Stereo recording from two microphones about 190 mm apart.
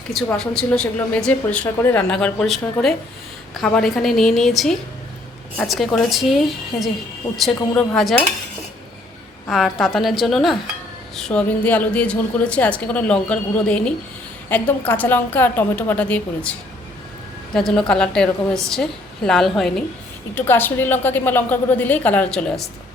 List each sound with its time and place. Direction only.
0.1 s speech: centre (ahead or behind)
9.5 s a woman's voice: centre (ahead or behind)
20.3 s a woman's voice: 10° left (ahead or behind)